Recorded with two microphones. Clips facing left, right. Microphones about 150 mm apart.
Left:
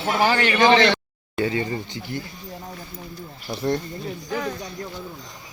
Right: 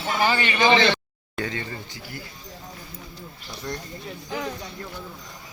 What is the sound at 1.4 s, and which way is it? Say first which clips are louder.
Speech: left 7 dB; 10° left (ahead or behind).